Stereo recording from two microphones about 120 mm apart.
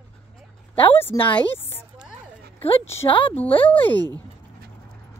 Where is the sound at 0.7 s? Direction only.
15° left (ahead or behind).